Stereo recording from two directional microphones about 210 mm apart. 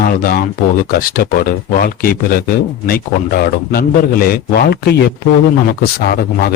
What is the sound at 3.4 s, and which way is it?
Speech, 45° left (ahead or behind).